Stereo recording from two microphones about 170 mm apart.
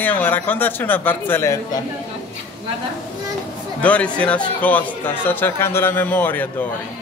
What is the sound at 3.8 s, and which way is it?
A man's voice, 10° left (ahead or behind).